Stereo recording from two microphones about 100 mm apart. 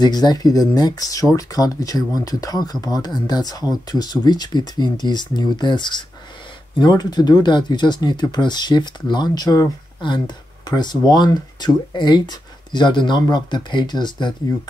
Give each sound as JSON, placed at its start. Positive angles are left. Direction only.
{"t": 0.0, "sound": "speech", "side_deg": 45}